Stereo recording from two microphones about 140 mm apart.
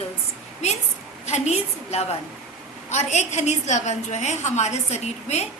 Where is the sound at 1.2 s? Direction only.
50° left (ahead or behind).